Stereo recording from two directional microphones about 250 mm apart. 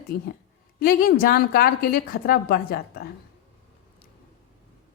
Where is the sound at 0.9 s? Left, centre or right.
Left.